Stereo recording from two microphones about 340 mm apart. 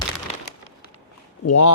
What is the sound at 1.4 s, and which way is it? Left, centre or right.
Speech, left.